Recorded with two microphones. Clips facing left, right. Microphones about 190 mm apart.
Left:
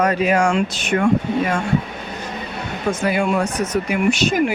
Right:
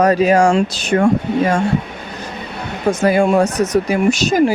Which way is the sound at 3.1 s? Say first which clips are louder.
Right 7 dB; 45° right (ahead or behind).